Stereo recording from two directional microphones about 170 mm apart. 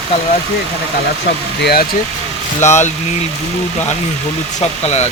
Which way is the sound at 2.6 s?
40° left (ahead or behind).